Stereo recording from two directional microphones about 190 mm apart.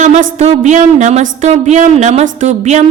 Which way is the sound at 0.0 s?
40° right (ahead or behind).